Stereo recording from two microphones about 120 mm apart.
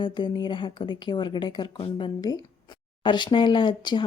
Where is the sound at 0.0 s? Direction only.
40° left (ahead or behind).